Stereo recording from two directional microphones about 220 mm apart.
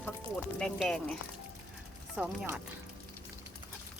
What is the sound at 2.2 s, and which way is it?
Speech, 5° right (ahead or behind).